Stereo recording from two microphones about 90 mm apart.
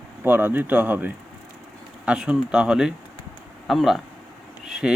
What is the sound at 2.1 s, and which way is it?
Speech, 10° right (ahead or behind).